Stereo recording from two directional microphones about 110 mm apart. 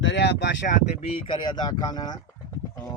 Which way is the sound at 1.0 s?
55° left (ahead or behind).